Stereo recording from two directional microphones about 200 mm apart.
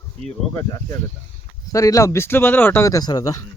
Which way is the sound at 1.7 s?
15° left (ahead or behind).